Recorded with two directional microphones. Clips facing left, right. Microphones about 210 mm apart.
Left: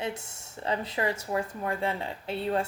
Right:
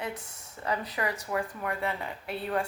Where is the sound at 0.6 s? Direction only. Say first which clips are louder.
Left 2 dB; 25° left (ahead or behind).